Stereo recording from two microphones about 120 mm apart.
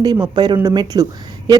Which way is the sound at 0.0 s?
35° right (ahead or behind).